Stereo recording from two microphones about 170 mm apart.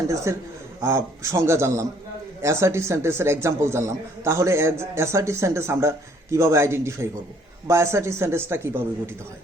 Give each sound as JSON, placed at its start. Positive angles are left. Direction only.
{"t": 0.3, "sound": "speech", "side_deg": -15}